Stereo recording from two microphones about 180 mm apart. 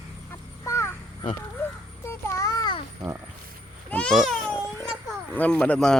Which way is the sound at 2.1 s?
15° left (ahead or behind).